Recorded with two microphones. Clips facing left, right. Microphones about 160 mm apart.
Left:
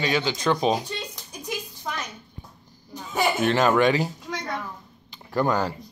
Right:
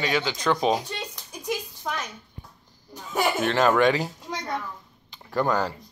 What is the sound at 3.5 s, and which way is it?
Speech, 5° left (ahead or behind).